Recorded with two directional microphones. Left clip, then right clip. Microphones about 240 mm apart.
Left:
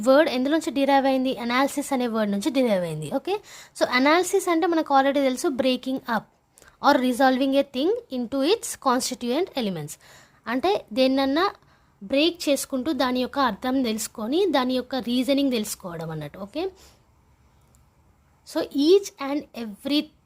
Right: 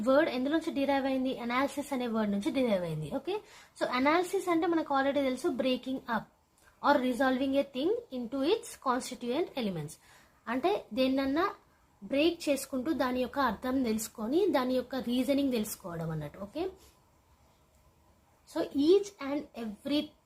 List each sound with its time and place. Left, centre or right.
0.0 s a woman's voice: left
18.5 s a woman's voice: left